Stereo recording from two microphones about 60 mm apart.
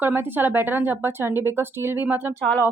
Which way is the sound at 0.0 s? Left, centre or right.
Right.